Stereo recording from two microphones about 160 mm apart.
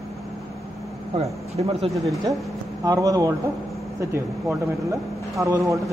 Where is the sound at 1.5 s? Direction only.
40° right (ahead or behind).